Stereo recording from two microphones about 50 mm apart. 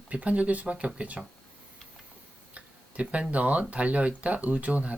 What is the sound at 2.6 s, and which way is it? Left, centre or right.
Speech, right.